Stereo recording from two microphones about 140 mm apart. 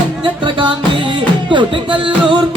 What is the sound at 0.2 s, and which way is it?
Music, 35° right (ahead or behind).